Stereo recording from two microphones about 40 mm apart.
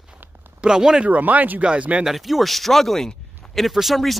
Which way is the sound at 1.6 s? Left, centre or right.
Right.